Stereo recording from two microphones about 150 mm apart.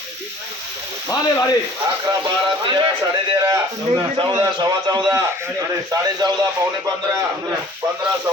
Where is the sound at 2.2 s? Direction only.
30° right (ahead or behind).